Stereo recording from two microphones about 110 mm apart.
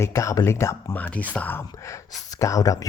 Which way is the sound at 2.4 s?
30° left (ahead or behind).